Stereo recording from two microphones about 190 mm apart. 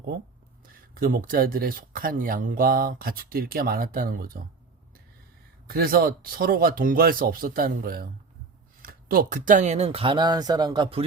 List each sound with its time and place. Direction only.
0.9 s speech: 50° right (ahead or behind)
5.6 s speech: 50° right (ahead or behind); by 11.0 s 25° right (ahead or behind)